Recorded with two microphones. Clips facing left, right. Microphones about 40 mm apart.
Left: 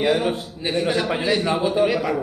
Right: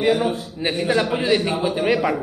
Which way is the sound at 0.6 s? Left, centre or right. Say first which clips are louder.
Right 1 dB; centre.